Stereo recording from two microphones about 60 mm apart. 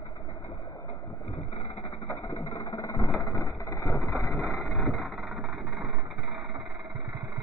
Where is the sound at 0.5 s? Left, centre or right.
Left.